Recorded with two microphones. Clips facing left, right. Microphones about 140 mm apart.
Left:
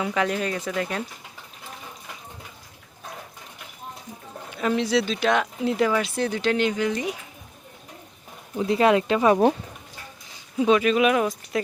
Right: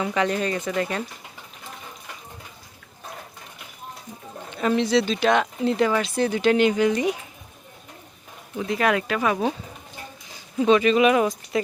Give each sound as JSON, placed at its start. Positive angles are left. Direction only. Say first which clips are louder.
{"t": 0.0, "sound": "speech", "louder": "right 1 dB", "side_deg": 0}
{"t": 4.5, "sound": "speech", "louder": "right 2 dB", "side_deg": 5}
{"t": 8.5, "sound": "speech", "louder": "left 3 dB", "side_deg": 30}
{"t": 10.6, "sound": "speech", "louder": "right 2 dB", "side_deg": 5}